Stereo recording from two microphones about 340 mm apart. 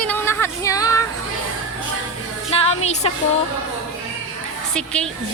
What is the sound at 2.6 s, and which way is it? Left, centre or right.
Music, centre.